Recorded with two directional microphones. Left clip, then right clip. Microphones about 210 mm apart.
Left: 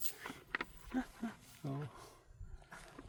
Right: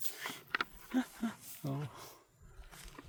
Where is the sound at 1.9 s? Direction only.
35° right (ahead or behind).